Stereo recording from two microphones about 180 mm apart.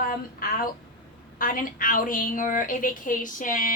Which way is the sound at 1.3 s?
50° left (ahead or behind).